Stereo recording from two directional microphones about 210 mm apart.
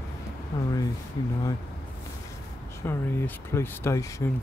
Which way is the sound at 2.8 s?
10° left (ahead or behind).